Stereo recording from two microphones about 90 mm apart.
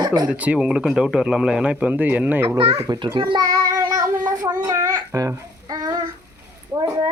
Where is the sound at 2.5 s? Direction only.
90° right.